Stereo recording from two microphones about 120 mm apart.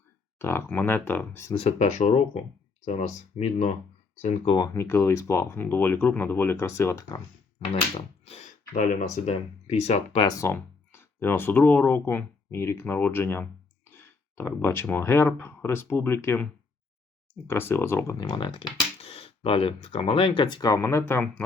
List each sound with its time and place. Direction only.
0.3 s speech: 20° left (ahead or behind)
1.5 s speech: 70° left (ahead or behind)
2.8 s speech: 70° left (ahead or behind)
4.4 s speech: 40° left (ahead or behind)
4.7 s speech: 20° left (ahead or behind)
7.7 s speech: 60° left (ahead or behind); by 9.0 s 90° left
9.2 s speech: 60° left (ahead or behind)
10.3 s speech: 20° left (ahead or behind)
18.2 s speech: 40° left (ahead or behind); by 21.4 s 15° left (ahead or behind)